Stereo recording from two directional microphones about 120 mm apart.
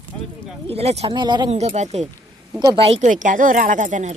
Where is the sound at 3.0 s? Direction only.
90° right.